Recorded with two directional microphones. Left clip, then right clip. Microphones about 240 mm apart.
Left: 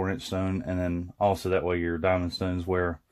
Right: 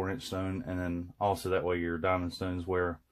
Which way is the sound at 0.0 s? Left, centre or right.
Left.